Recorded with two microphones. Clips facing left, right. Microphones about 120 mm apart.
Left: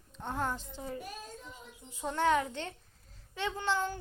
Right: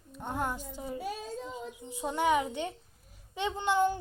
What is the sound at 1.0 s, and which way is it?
Speech, 90° right.